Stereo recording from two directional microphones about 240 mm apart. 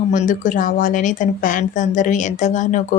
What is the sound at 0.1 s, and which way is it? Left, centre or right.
Speech, left.